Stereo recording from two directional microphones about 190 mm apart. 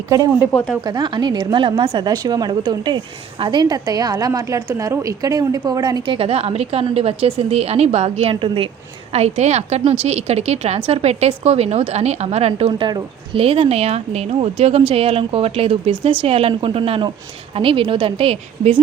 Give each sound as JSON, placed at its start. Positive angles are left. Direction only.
{"t": 0.1, "sound": "speech", "side_deg": -15}
{"t": 0.5, "sound": "a woman's voice", "side_deg": 5}
{"t": 0.9, "sound": "a woman's voice", "side_deg": -25}